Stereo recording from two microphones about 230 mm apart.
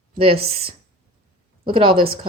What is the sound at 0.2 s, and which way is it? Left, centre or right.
Speech, right.